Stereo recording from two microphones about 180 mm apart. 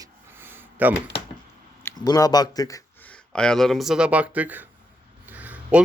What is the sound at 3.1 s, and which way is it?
Speech, 5° left (ahead or behind).